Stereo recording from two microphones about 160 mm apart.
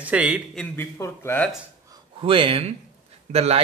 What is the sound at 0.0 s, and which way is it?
Speech, 10° right (ahead or behind).